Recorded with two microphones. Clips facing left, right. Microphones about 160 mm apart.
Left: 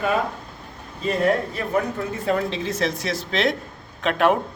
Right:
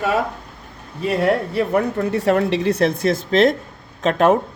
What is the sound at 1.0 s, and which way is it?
A man's voice, 70° right (ahead or behind).